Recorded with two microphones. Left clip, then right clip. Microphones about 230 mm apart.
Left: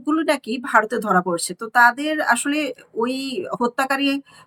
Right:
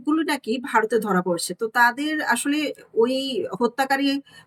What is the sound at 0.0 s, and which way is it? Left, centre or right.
Speech, centre.